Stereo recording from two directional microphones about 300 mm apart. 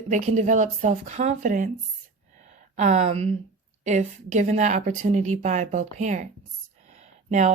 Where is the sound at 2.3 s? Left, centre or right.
Right.